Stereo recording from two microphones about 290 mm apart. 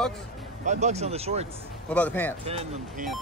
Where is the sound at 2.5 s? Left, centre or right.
Right.